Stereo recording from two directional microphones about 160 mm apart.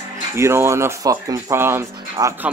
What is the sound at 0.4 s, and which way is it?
Speech, 15° right (ahead or behind).